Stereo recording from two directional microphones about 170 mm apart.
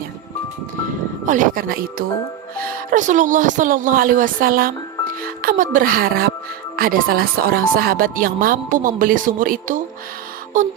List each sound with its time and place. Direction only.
1.2 s speech: 50° right (ahead or behind)